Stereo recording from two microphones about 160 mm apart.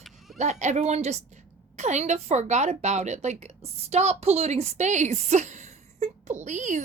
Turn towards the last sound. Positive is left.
turn(degrees=-50)  # may be behind; listen again after turning